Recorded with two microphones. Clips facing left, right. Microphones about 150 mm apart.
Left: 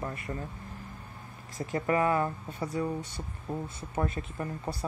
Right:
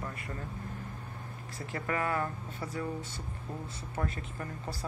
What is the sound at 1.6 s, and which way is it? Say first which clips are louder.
Speech: left 7 dB; 30° left (ahead or behind).